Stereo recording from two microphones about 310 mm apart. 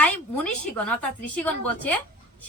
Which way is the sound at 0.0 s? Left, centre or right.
Centre.